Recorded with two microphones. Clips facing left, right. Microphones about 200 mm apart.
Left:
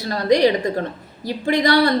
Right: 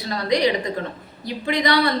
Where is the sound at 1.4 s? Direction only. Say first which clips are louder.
Left 4 dB; 45° left (ahead or behind).